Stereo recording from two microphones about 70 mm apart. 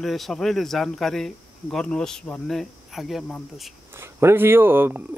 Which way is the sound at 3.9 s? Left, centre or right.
Right.